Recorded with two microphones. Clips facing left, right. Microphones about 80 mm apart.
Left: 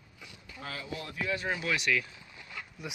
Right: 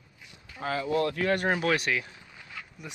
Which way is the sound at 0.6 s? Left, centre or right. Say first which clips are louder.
Right 10 dB; right.